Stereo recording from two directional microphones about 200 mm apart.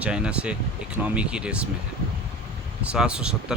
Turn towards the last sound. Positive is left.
turn(degrees=-5)  # may be behind; listen again after turning